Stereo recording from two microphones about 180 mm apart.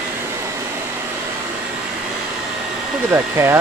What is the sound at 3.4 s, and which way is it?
Speech, 15° right (ahead or behind).